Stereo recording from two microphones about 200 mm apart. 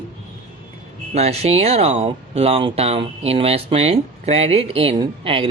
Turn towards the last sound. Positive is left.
turn(degrees=-25)  # may be behind; listen again after turning